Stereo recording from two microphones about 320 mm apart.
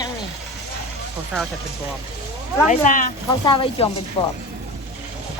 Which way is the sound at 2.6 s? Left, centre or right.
Left.